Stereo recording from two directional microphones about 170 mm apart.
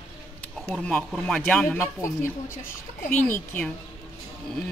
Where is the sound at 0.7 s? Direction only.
5° left (ahead or behind).